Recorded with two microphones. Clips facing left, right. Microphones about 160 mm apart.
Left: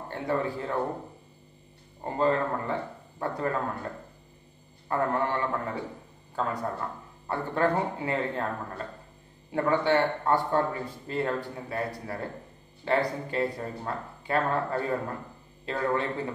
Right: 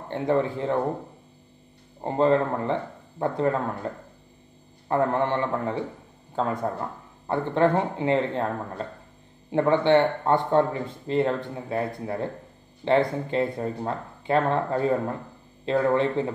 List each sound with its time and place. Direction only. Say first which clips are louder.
0.1 s speech: right 6 dB; 25° right (ahead or behind)
2.0 s speech: right 5 dB; 25° right (ahead or behind)
4.8 s speech: right 4 dB; 25° right (ahead or behind)